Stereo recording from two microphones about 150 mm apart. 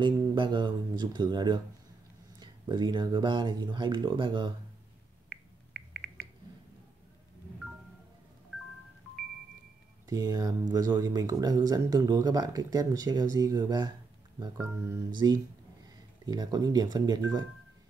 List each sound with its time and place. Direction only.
0.0 s speech: 30° right (ahead or behind)
10.0 s speech: 25° right (ahead or behind)